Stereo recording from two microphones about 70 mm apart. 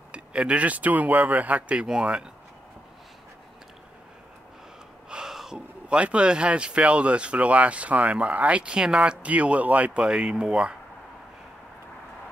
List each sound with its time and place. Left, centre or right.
0.1 s speech: centre
5.1 s speech: centre
10.0 s speech: centre